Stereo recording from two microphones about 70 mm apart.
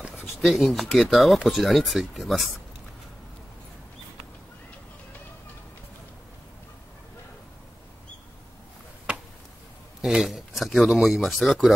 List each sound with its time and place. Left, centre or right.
0.1 s speech: centre
10.0 s speech: centre